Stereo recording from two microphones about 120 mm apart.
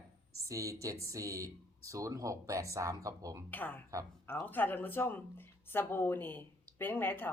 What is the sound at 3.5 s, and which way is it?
A woman's voice, 15° left (ahead or behind).